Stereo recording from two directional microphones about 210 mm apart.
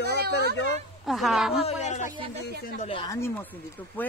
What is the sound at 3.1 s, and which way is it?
Speech, 10° left (ahead or behind).